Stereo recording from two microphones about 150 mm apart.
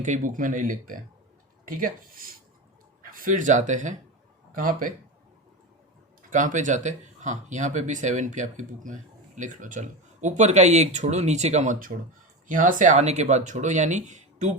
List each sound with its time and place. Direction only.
0.0 s speech: 60° right (ahead or behind)
6.3 s speech: 55° right (ahead or behind)